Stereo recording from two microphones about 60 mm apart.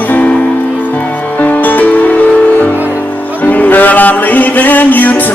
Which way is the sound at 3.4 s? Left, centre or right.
Left.